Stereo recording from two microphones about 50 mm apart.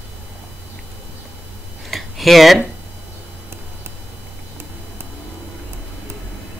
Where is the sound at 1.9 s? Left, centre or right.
Centre.